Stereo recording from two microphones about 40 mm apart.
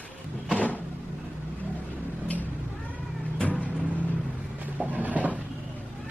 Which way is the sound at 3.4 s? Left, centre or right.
Left.